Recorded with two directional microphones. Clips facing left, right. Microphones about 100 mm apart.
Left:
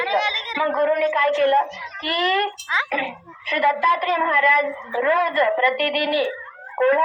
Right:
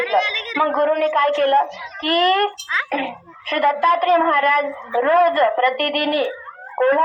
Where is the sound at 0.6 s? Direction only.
50° right (ahead or behind).